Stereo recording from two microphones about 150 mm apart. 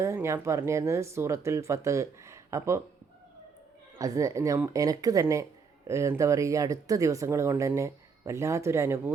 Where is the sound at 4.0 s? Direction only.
20° right (ahead or behind).